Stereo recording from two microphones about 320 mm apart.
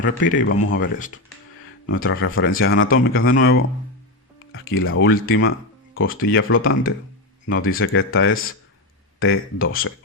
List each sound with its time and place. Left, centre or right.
0.0 s speech: left
0.4 s a man's voice: left
1.9 s a man's voice: left